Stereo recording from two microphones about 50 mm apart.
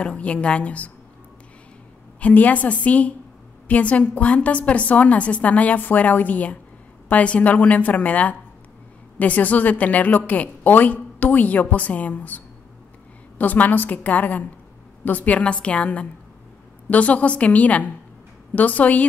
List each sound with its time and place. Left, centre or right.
0.0 s a woman's voice: left
2.1 s a woman's voice: left
13.4 s a woman's voice: left